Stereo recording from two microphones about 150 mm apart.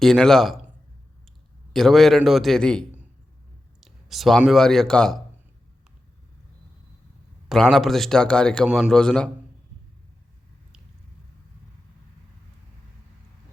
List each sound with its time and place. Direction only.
0.0 s a man's voice: 5° left (ahead or behind)
1.7 s a man's voice: centre (ahead or behind)
7.4 s a man's voice: centre (ahead or behind)